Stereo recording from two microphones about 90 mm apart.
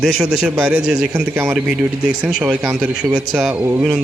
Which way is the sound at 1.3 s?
25° right (ahead or behind).